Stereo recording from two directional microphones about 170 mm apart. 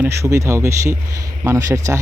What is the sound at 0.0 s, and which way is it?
Speech, 15° right (ahead or behind).